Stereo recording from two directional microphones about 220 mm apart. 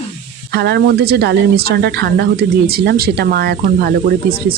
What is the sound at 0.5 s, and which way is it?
Speech, 45° right (ahead or behind).